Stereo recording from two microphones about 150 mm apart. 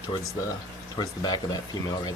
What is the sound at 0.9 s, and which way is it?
Speech, 25° left (ahead or behind).